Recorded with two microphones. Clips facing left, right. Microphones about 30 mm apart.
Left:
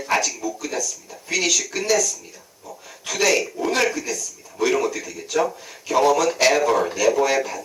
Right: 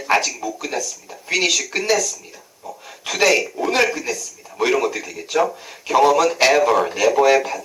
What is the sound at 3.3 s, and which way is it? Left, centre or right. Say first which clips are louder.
A man's voice: right 2 dB; centre.